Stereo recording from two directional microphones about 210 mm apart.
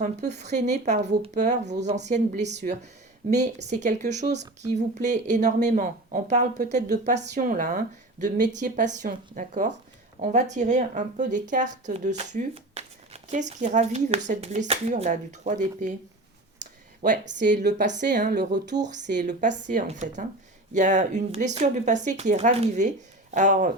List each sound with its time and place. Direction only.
0.0 s speech: 35° right (ahead or behind)
17.0 s speech: 35° right (ahead or behind)
19.4 s speech: 35° right (ahead or behind)